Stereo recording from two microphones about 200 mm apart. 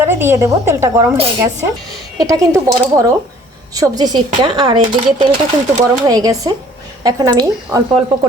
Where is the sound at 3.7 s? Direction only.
20° right (ahead or behind).